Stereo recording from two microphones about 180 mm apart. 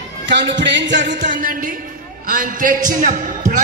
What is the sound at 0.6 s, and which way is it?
Speech, 80° right.